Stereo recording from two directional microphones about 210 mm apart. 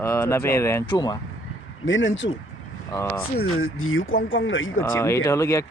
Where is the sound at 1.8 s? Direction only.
65° left (ahead or behind).